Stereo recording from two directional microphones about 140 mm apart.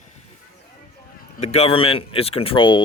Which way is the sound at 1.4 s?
45° left (ahead or behind).